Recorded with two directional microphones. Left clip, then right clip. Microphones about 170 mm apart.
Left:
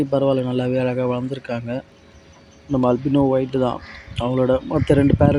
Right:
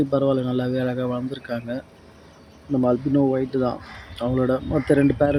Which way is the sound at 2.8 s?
15° left (ahead or behind).